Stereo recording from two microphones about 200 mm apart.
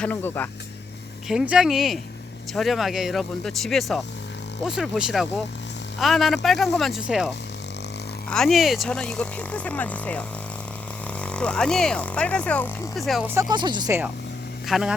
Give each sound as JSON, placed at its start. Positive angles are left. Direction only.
{"t": 0.0, "sound": "speech", "side_deg": 10}
{"t": 1.3, "sound": "speech", "side_deg": -5}
{"t": 8.3, "sound": "speech", "side_deg": 0}
{"t": 11.3, "sound": "speech", "side_deg": 5}
{"t": 13.5, "sound": "speech", "side_deg": -20}
{"t": 14.7, "sound": "speech", "side_deg": 0}